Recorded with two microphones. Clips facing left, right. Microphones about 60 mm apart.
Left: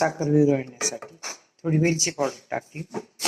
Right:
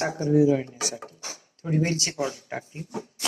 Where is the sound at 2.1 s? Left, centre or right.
Left.